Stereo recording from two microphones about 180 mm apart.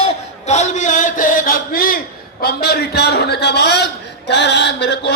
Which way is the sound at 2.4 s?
60° left (ahead or behind).